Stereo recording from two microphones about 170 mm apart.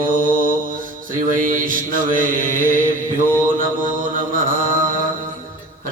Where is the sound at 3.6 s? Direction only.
55° right (ahead or behind).